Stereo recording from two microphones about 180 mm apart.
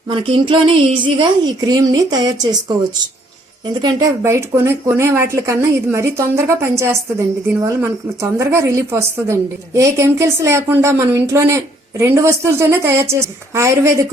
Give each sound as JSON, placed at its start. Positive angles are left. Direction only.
{"t": 0.1, "sound": "speech", "side_deg": -30}
{"t": 3.8, "sound": "a woman's voice", "side_deg": -20}